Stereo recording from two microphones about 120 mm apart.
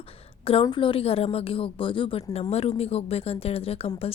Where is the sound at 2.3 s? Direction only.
60° left (ahead or behind).